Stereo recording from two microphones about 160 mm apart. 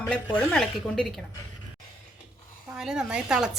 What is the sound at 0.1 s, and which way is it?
A woman's voice, 5° left (ahead or behind).